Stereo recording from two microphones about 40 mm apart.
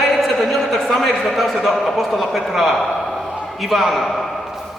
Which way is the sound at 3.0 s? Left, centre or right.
Centre.